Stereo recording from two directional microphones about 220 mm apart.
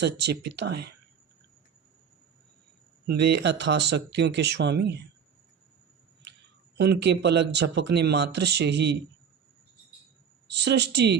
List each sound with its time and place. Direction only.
0.0 s speech: 50° right (ahead or behind)
3.1 s speech: 50° right (ahead or behind)
6.7 s speech: 50° right (ahead or behind)
10.5 s speech: 50° right (ahead or behind)